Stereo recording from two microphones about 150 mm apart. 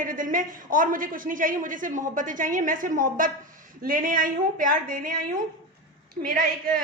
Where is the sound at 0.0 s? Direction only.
65° right (ahead or behind).